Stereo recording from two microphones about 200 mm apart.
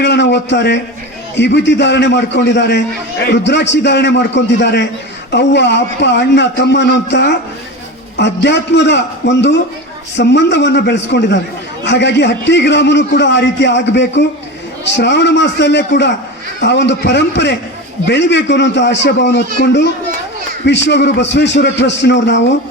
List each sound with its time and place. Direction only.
0.0 s a sound: 60° left (ahead or behind)
1.4 s a man's voice: 60° left (ahead or behind)
20.7 s a man's voice: 60° left (ahead or behind)